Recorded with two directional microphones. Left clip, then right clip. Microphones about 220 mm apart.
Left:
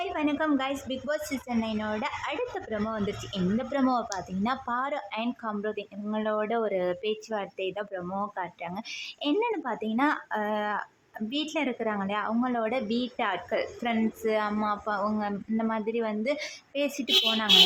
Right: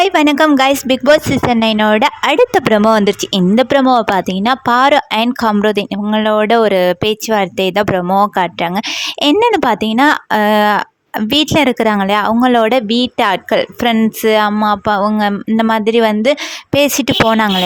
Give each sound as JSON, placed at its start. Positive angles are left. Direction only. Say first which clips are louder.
{"t": 0.0, "sound": "a woman's voice", "louder": "right 19 dB", "side_deg": -50}